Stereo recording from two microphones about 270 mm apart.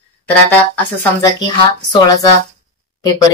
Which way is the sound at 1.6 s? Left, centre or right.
Centre.